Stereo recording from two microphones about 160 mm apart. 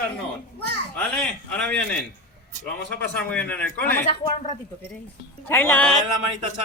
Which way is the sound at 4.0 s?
50° left (ahead or behind).